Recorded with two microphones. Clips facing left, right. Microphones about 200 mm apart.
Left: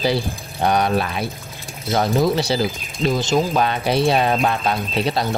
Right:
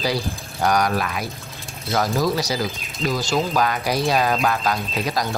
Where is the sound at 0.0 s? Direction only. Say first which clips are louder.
Left 3 dB; 25° left (ahead or behind).